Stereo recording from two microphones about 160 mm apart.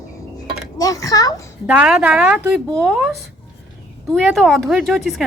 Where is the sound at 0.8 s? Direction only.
20° left (ahead or behind).